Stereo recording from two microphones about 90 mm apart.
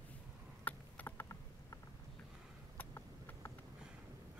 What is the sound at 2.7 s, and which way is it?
Vehicle, 30° left (ahead or behind).